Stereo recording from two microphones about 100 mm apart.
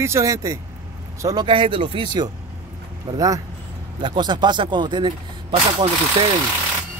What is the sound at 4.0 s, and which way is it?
Speech, 50° right (ahead or behind).